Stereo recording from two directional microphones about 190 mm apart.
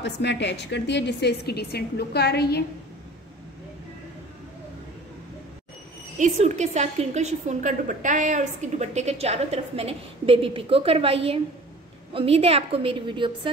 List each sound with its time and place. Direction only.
0.0 s a woman's voice: 65° left (ahead or behind)
6.1 s a woman's voice: 35° right (ahead or behind)